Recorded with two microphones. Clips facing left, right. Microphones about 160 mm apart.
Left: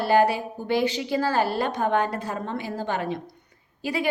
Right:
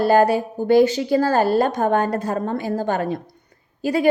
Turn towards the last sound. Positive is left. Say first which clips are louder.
# right 8 dB
turn(degrees=-45)  # may be behind; listen again after turning